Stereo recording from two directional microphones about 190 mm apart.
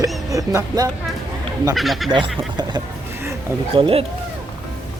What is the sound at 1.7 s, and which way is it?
Speech, centre (ahead or behind).